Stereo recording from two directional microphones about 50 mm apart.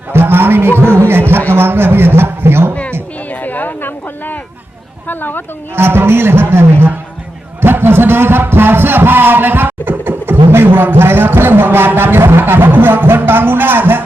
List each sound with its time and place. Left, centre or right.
0.1 s a sound: right
0.9 s a man's voice: right
3.2 s a sound: left
5.0 s speech: left
5.7 s a man's voice: right
7.6 s music: right